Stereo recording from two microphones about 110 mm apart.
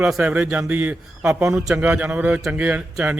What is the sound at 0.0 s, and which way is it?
Speech, 5° right (ahead or behind).